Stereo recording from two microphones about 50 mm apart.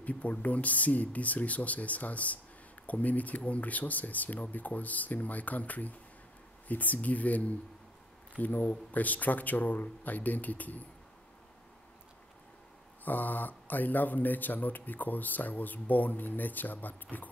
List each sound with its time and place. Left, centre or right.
0.0 s speech: left
13.0 s speech: left